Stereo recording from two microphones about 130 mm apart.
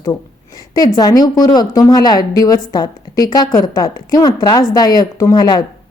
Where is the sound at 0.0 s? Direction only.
30° left (ahead or behind).